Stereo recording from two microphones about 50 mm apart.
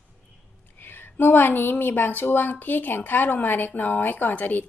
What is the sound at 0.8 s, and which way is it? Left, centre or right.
Speech, left.